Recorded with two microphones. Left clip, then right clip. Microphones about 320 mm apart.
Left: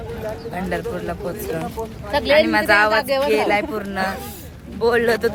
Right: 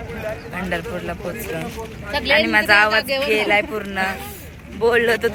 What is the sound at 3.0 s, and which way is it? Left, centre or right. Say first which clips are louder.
Speech: left 2 dB; left.